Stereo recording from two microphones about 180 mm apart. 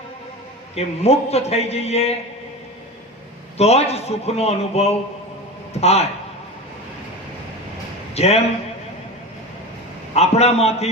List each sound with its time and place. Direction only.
0.8 s a man's voice: 35° left (ahead or behind)
3.6 s a man's voice: 35° left (ahead or behind)
8.1 s a man's voice: 35° left (ahead or behind)
10.2 s a man's voice: 35° left (ahead or behind)